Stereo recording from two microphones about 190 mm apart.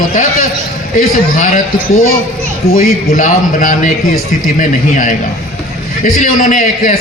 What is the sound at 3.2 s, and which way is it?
A man's voice, 45° left (ahead or behind).